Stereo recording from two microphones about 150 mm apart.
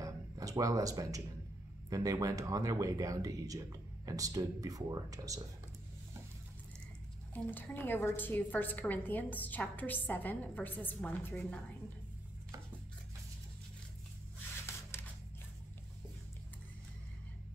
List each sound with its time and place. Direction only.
0.0 s music: 20° right (ahead or behind)
1.9 s speech: 25° right (ahead or behind)
7.5 s a woman's voice: 10° left (ahead or behind)
14.9 s scissors: 15° left (ahead or behind)